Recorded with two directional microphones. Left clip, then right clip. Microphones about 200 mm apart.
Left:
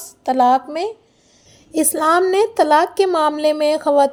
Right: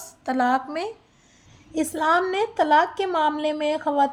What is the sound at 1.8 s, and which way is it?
A woman's voice, 40° left (ahead or behind).